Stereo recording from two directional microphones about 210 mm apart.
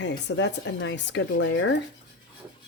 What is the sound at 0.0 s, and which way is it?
Speech, 55° left (ahead or behind).